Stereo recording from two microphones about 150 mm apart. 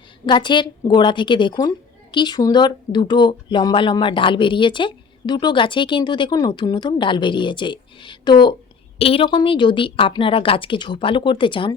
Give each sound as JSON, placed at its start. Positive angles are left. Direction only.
{"t": 0.3, "sound": "speech", "side_deg": 30}